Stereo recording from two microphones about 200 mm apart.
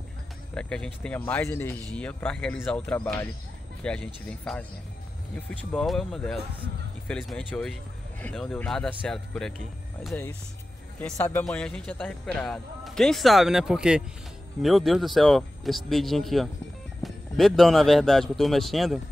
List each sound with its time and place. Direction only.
0.6 s a man's voice: 5° left (ahead or behind)